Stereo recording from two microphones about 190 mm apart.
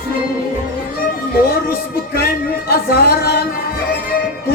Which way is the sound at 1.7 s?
55° left (ahead or behind).